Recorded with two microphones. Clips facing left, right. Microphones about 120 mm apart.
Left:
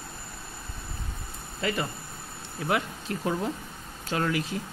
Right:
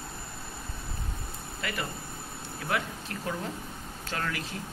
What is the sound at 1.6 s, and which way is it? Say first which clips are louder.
Speech: left 6 dB; 30° left (ahead or behind).